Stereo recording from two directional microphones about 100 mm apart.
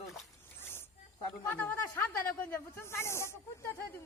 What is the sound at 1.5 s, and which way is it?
Speech, 20° left (ahead or behind).